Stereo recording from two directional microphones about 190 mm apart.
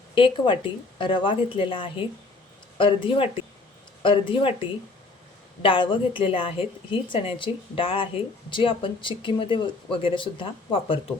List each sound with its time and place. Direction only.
0.1 s speech: 25° left (ahead or behind)